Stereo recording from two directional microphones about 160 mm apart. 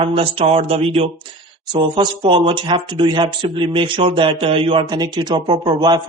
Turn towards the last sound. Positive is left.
turn(degrees=-25)  # may be behind; listen again after turning